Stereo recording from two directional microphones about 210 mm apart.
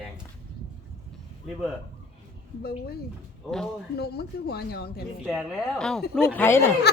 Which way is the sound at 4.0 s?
50° left (ahead or behind).